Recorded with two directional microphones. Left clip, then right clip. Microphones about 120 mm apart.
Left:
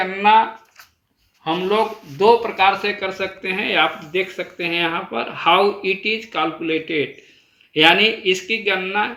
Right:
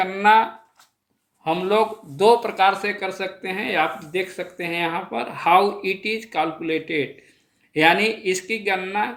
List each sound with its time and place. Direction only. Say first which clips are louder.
0.0 s speech: left 2 dB; 40° right (ahead or behind)
1.5 s speech: left 1 dB; 40° right (ahead or behind)
2.8 s speech: left 3 dB; 20° right (ahead or behind)